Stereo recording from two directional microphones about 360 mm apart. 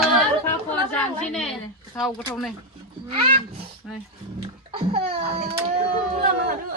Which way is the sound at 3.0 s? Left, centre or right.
Centre.